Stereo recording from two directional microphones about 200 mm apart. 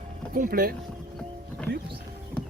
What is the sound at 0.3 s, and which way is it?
Speech, 45° right (ahead or behind).